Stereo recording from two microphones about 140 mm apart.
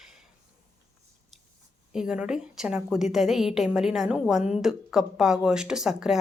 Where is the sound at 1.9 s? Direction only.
5° right (ahead or behind).